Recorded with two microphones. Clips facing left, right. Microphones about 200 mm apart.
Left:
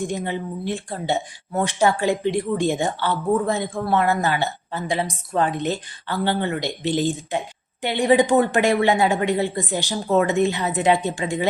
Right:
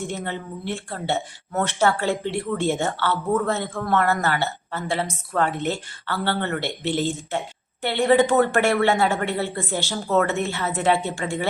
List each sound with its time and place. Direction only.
0.0 s speech: 15° left (ahead or behind)